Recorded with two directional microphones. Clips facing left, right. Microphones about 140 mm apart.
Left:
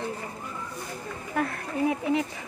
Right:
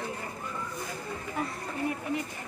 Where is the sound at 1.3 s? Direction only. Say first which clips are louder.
Left 7 dB; 60° left (ahead or behind); by 2.4 s 90° left.